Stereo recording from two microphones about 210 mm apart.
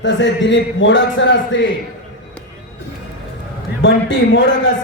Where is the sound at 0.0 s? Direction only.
60° left (ahead or behind).